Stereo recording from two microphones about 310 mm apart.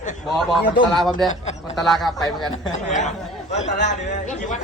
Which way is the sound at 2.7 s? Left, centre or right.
Left.